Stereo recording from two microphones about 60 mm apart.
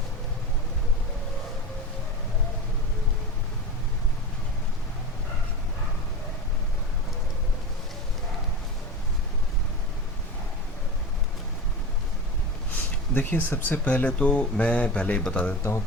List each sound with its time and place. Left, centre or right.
12.7 s speech: left; by 15.4 s centre